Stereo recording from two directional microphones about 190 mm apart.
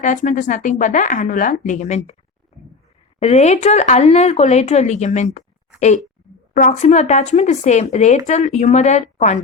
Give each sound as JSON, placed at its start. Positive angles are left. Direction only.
{"t": 0.0, "sound": "speech", "side_deg": 40}
{"t": 3.2, "sound": "speech", "side_deg": 35}
{"t": 6.5, "sound": "speech", "side_deg": 40}